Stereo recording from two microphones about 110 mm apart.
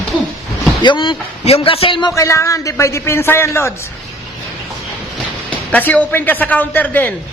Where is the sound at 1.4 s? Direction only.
60° left (ahead or behind).